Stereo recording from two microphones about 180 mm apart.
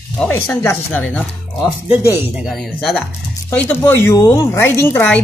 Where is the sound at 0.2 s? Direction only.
10° left (ahead or behind).